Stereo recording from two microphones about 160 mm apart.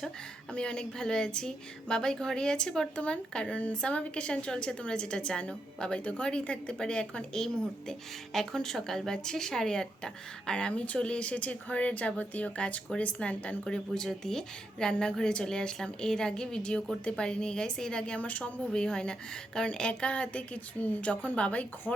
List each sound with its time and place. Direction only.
0.5 s a woman's voice: 5° left (ahead or behind)